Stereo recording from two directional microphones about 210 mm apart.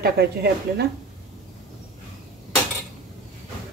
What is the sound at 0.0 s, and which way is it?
Speech, 50° right (ahead or behind).